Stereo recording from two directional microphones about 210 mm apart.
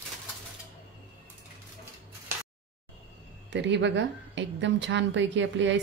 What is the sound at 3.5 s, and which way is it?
A woman's voice, 55° right (ahead or behind).